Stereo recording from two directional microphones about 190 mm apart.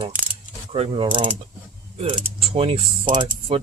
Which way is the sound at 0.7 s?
30° right (ahead or behind).